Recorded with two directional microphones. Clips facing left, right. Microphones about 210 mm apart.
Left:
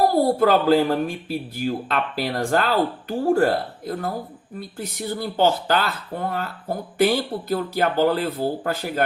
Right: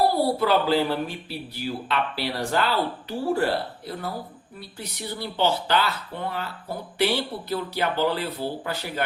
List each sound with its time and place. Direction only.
0.3 s speech: 45° left (ahead or behind)